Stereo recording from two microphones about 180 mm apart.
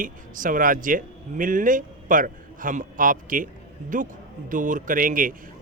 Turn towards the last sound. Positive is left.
turn(degrees=-50)  # may be behind; listen again after turning